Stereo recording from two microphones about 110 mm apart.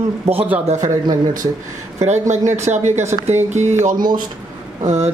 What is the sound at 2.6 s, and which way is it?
Speech, 90° right.